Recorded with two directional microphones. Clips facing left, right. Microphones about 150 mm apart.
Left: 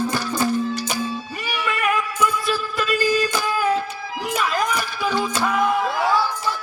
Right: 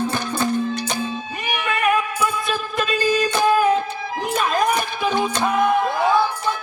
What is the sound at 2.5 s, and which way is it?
Music, 20° right (ahead or behind).